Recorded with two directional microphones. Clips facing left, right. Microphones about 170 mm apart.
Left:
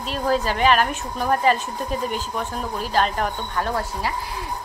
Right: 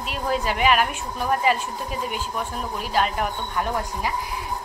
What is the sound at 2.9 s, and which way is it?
A woman's voice, 10° right (ahead or behind).